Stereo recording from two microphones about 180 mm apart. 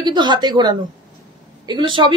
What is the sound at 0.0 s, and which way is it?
A woman's voice, 25° right (ahead or behind).